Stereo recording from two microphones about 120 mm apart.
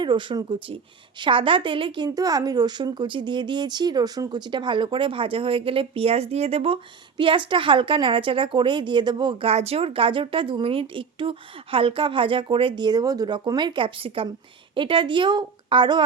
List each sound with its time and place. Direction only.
0.0 s a woman's voice: 40° right (ahead or behind)
2.0 s speech: 30° right (ahead or behind); by 6.7 s 55° right (ahead or behind)
7.2 s a woman's voice: 45° right (ahead or behind)
9.5 s a woman's voice: 60° right (ahead or behind); by 16.0 s 40° right (ahead or behind)